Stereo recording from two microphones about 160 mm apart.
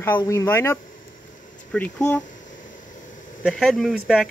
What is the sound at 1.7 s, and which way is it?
Speech, 10° left (ahead or behind).